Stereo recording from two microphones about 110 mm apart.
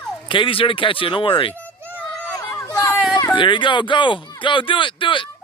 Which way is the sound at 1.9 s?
15° left (ahead or behind).